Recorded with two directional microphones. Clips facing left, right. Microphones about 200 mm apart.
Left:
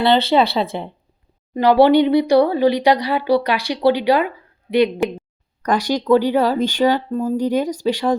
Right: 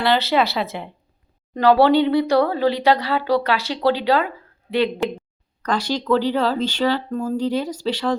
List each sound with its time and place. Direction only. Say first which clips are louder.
0.0 s speech: left 4 dB; 25° left (ahead or behind)
1.5 s speech: left 2 dB; 15° left (ahead or behind)